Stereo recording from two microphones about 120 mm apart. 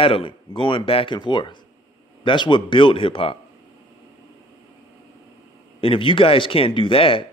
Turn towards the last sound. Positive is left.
turn(degrees=50)  # may be behind; listen again after turning